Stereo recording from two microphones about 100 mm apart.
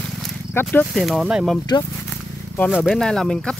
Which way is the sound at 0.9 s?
Centre (ahead or behind).